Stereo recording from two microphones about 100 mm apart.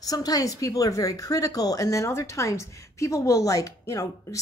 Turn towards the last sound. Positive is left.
turn(degrees=35)  # may be behind; listen again after turning